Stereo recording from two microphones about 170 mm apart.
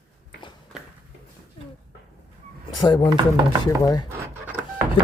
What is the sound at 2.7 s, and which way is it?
Speech, 25° left (ahead or behind).